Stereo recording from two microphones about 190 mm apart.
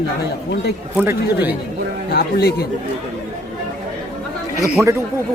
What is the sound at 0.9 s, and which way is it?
Speech, 10° right (ahead or behind).